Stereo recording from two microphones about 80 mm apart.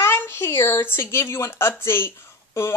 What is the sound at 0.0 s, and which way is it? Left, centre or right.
A woman's voice, left.